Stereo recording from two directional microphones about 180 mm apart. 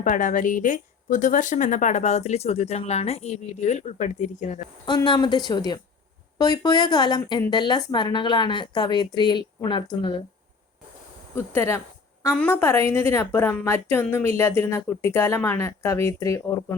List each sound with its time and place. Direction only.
0.0 s speech: 45° left (ahead or behind)
4.9 s speech: 25° left (ahead or behind)
11.3 s speech: 15° left (ahead or behind)